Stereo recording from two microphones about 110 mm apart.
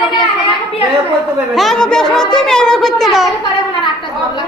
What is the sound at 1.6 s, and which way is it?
Speech, 5° left (ahead or behind).